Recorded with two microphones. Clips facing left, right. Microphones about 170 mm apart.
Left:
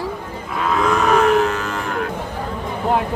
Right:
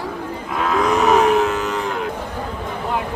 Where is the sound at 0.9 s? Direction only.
20° right (ahead or behind).